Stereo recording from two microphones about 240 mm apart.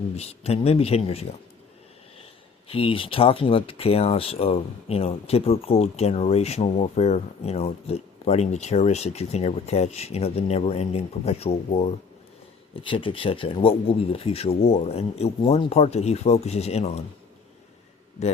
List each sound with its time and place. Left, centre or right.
0.2 s speech: left
2.6 s speech: left